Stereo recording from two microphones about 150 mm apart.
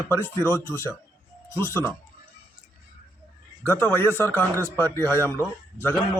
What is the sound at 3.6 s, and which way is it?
Speech, 15° left (ahead or behind).